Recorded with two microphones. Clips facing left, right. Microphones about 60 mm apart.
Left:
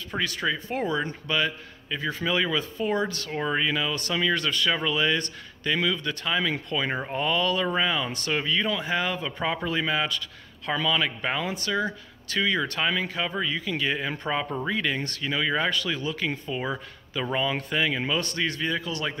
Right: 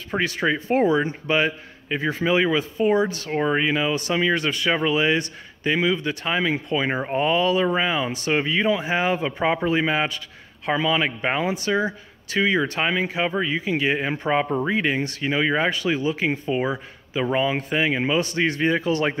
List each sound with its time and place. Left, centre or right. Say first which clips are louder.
0.1 s speech: right 5 dB; right
0.8 s speech: right 7 dB; right
16.6 s speech: right 5 dB; centre; by 19.1 s right